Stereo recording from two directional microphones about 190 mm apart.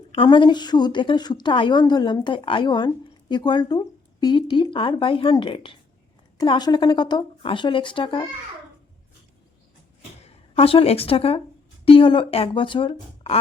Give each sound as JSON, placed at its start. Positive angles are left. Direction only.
{"t": 0.1, "sound": "a woman's voice", "side_deg": 25}
{"t": 10.2, "sound": "a woman's voice", "side_deg": 30}